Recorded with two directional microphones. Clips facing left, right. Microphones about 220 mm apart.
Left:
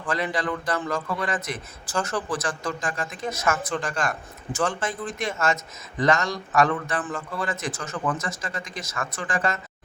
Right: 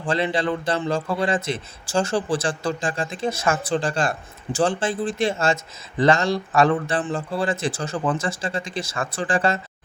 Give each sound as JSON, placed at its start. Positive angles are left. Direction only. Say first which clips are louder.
{"t": 0.0, "sound": "a man's voice", "louder": "right 4 dB", "side_deg": -30}